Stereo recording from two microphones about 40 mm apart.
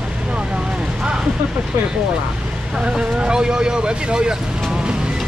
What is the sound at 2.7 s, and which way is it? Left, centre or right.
Speech, right.